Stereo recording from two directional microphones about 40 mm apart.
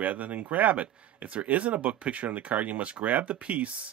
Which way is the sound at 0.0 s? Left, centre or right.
Right.